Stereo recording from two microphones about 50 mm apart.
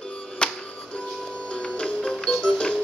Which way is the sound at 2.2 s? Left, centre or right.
Centre.